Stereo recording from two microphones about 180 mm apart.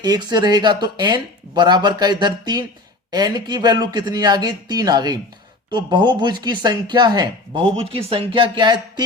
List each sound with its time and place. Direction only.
0.0 s speech: 20° right (ahead or behind)